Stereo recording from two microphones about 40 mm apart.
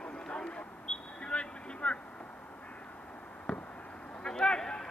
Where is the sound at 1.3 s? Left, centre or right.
Left.